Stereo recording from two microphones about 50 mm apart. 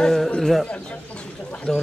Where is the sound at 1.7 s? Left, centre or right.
Centre.